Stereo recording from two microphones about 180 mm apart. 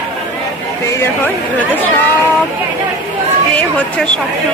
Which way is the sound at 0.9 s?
10° left (ahead or behind).